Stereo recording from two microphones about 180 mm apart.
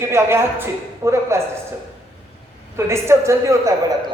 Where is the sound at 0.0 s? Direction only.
15° right (ahead or behind).